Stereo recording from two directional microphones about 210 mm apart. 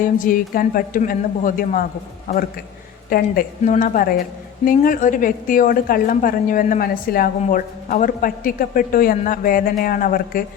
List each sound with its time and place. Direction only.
0.0 s a woman's voice: 40° left (ahead or behind)